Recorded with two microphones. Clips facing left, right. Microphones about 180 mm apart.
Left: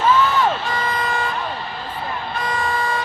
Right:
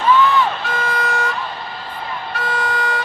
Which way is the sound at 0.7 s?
75° right (ahead or behind).